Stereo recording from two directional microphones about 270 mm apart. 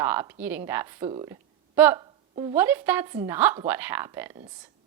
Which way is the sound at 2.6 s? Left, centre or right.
Centre.